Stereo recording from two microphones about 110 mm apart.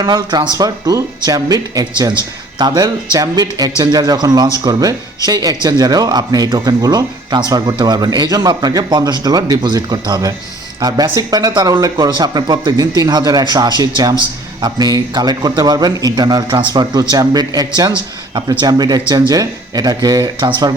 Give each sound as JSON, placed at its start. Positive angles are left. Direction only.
{"t": 0.0, "sound": "a man's voice", "side_deg": -40}